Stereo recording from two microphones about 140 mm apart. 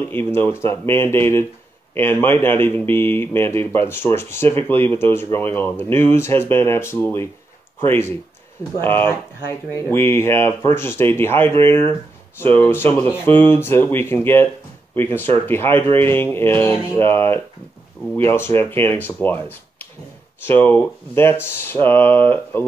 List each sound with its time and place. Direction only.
0.1 s speech: 15° left (ahead or behind)